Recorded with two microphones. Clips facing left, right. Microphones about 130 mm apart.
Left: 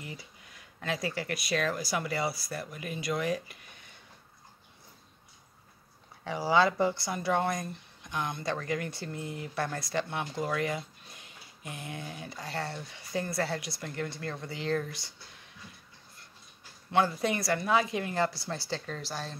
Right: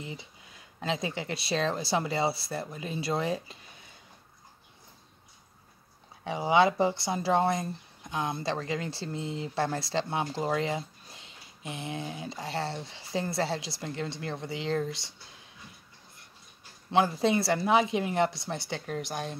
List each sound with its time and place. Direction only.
0.0 s speech: 25° right (ahead or behind)
6.2 s speech: 20° right (ahead or behind)
16.9 s speech: 25° right (ahead or behind)